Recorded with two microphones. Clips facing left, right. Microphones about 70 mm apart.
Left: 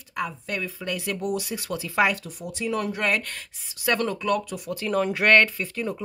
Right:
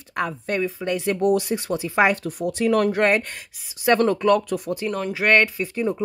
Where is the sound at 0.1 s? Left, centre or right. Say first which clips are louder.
Right 5 dB; right.